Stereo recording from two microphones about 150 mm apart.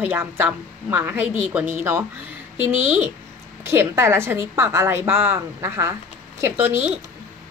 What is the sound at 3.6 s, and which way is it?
A woman's voice, 15° right (ahead or behind).